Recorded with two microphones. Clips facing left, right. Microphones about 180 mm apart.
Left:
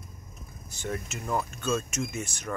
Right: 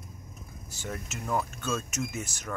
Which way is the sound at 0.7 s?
5° right (ahead or behind).